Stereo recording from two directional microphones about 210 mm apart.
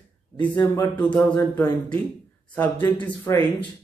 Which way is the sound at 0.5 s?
20° left (ahead or behind).